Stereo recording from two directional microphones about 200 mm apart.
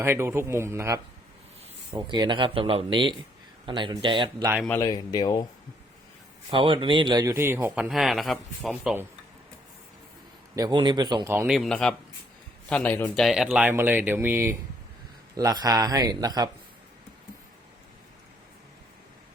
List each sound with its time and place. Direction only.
0.0 s speech: 10° right (ahead or behind)
4.6 s speech: 10° left (ahead or behind)
6.5 s speech: 25° right (ahead or behind)
7.9 s a man's voice: centre (ahead or behind)
10.5 s speech: 20° right (ahead or behind)
11.5 s a man's voice: centre (ahead or behind); by 16.5 s 20° right (ahead or behind)